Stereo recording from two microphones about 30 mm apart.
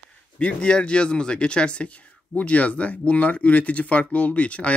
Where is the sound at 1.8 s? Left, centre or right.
Left.